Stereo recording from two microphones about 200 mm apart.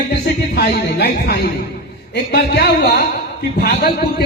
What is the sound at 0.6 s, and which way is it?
A man's voice, 55° left (ahead or behind).